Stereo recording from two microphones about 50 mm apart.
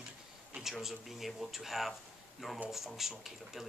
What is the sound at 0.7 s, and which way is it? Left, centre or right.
Speech, centre.